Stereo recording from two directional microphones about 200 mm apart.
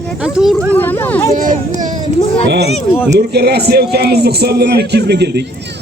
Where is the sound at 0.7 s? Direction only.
10° left (ahead or behind).